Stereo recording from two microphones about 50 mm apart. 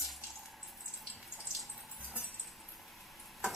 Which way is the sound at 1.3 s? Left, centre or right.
Centre.